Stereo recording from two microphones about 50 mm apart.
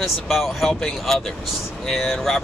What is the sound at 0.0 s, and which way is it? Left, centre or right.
Speech, centre.